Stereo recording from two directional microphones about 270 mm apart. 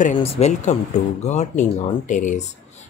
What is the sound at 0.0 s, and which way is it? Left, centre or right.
Speech, left.